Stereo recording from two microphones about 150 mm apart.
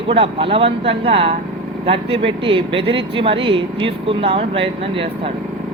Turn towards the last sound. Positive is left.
turn(degrees=-40)  # may be behind; listen again after turning